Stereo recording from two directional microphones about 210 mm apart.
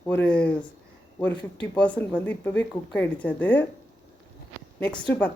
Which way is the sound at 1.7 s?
5° left (ahead or behind).